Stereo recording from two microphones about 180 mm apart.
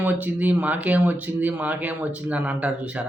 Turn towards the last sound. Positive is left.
turn(degrees=-5)  # may be behind; listen again after turning